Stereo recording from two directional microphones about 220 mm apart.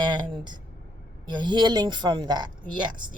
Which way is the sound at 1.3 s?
20° right (ahead or behind).